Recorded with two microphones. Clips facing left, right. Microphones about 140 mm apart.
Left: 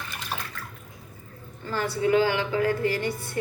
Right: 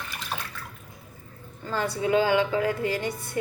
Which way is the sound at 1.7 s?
20° right (ahead or behind).